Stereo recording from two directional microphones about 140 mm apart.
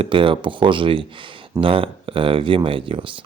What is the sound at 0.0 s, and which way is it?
Speech, 40° right (ahead or behind).